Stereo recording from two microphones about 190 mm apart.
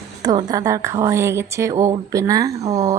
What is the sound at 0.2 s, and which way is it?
Speech, 20° right (ahead or behind).